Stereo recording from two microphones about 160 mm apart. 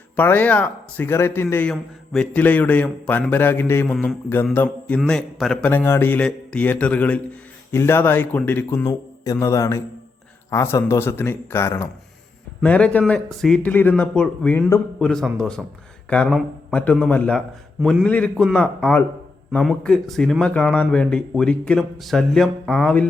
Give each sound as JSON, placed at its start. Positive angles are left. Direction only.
{"t": 0.2, "sound": "speech", "side_deg": 10}
{"t": 3.9, "sound": "speech", "side_deg": 0}
{"t": 4.5, "sound": "speech", "side_deg": 15}
{"t": 8.8, "sound": "speech", "side_deg": 20}